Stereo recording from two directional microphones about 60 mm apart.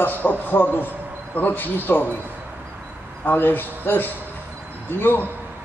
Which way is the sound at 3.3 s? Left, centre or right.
Left.